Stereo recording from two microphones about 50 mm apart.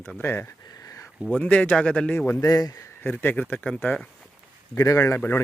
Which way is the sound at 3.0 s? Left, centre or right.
Left.